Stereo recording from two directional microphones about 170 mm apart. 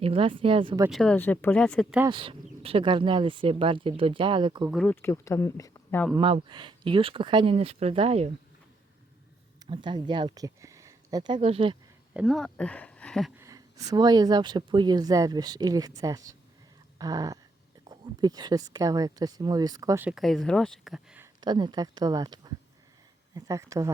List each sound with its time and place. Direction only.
0.0 s speech: 30° right (ahead or behind)
0.9 s speech: 5° left (ahead or behind)
2.0 s speech: 30° right (ahead or behind)
4.7 s speech: 5° left (ahead or behind)
5.0 s speech: 15° left (ahead or behind)
6.1 s speech: 30° right (ahead or behind)
9.6 s speech: 30° right (ahead or behind)
11.3 s speech: 35° right (ahead or behind)
12.1 s speech: centre (ahead or behind)
13.3 s speech: 20° right (ahead or behind)
20.1 s speech: centre (ahead or behind)
21.4 s speech: 25° right (ahead or behind)